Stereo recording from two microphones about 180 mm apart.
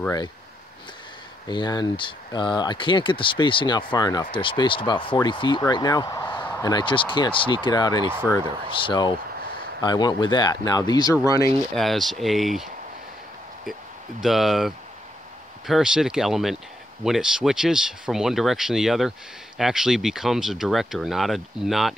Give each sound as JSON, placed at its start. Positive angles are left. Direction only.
{"t": 1.5, "sound": "speech", "side_deg": 25}
{"t": 6.4, "sound": "a sound", "side_deg": 10}
{"t": 6.7, "sound": "speech", "side_deg": 25}
{"t": 8.2, "sound": "speech", "side_deg": 15}
{"t": 8.8, "sound": "speech", "side_deg": 25}
{"t": 11.7, "sound": "speech", "side_deg": 0}
{"t": 14.2, "sound": "speech", "side_deg": 0}